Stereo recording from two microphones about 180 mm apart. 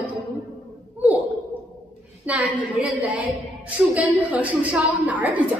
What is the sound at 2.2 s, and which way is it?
Speech, 10° right (ahead or behind).